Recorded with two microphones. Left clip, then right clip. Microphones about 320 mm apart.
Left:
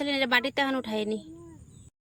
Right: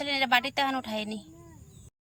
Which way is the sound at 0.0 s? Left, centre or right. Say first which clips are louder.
Even; centre.